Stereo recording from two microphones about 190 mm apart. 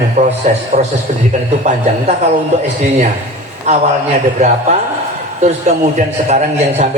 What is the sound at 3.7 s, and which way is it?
A man's voice, 35° right (ahead or behind).